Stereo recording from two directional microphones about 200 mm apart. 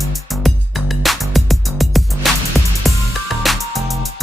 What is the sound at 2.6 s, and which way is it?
Music, 15° right (ahead or behind).